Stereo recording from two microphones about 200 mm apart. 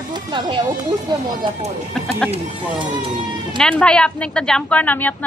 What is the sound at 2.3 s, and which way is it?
Speech, 25° right (ahead or behind).